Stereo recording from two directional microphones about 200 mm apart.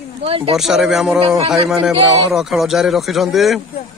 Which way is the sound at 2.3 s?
Centre (ahead or behind).